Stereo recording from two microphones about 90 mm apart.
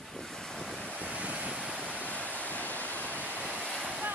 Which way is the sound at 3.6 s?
5° left (ahead or behind).